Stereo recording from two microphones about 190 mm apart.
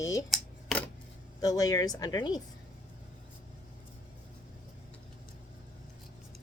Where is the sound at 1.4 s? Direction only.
20° left (ahead or behind).